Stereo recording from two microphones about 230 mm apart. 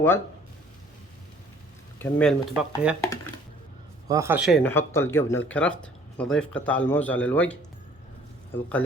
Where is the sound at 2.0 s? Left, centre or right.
Centre.